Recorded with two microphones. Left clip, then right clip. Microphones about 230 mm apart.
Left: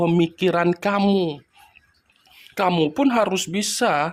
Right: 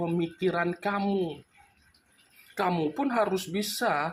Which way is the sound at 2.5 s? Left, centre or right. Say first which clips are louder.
Left 8 dB; left.